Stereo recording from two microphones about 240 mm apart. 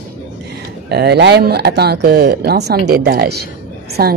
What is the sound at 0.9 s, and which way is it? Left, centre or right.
Speech, right.